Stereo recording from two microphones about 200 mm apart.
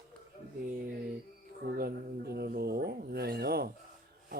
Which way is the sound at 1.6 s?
50° right (ahead or behind).